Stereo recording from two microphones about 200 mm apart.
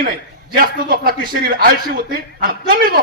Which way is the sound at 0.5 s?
45° right (ahead or behind).